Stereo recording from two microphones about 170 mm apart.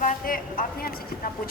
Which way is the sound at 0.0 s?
55° left (ahead or behind).